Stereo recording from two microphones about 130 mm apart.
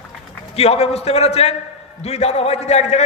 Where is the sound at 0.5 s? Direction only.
50° left (ahead or behind).